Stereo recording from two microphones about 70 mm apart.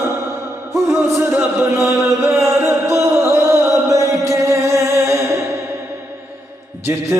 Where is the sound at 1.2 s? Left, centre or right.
Right.